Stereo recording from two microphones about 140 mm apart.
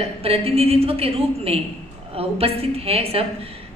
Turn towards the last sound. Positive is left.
turn(degrees=-45)  # may be behind; listen again after turning